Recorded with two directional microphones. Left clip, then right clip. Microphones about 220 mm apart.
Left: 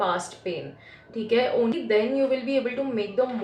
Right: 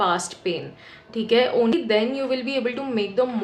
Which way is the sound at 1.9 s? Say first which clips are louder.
Even; 50° right (ahead or behind).